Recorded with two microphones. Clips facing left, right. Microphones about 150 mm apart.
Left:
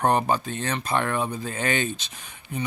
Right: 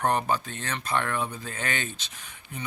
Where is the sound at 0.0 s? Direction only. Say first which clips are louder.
Left 4 dB; 25° left (ahead or behind).